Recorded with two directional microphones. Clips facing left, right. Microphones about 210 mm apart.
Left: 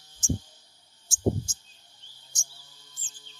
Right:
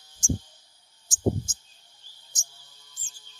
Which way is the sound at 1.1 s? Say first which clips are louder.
Right 1 dB; 20° right (ahead or behind).